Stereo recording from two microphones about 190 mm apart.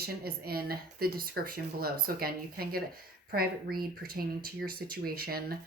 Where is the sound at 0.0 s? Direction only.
55° right (ahead or behind).